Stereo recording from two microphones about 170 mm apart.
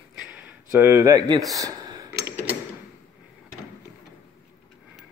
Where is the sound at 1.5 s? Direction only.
20° right (ahead or behind).